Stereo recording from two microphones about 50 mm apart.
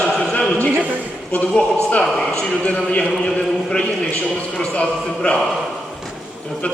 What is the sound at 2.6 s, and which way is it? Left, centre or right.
Speech, left.